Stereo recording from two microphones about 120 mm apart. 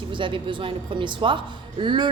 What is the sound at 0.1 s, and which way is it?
A woman's voice, 45° right (ahead or behind).